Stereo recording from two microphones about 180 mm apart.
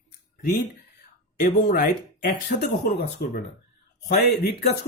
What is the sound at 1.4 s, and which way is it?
Speech, 50° left (ahead or behind).